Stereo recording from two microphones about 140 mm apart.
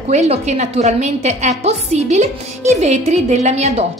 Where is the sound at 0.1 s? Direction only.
55° right (ahead or behind).